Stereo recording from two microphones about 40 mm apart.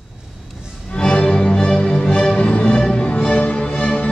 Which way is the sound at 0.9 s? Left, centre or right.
Left.